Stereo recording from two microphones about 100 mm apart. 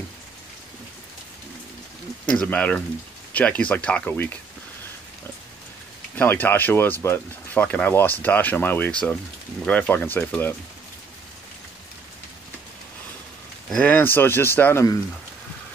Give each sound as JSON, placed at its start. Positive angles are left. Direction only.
{"t": 2.2, "sound": "speech", "side_deg": 15}
{"t": 6.1, "sound": "speech", "side_deg": 15}
{"t": 13.7, "sound": "speech", "side_deg": 15}